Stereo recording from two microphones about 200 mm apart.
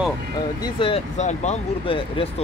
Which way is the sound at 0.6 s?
25° left (ahead or behind).